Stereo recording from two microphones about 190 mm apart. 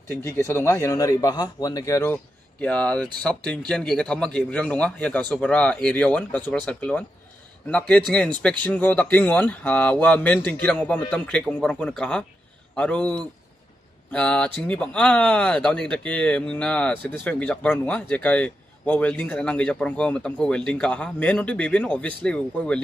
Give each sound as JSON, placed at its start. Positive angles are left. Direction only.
{"t": 0.1, "sound": "a man's voice", "side_deg": 15}
{"t": 2.6, "sound": "a man's voice", "side_deg": 5}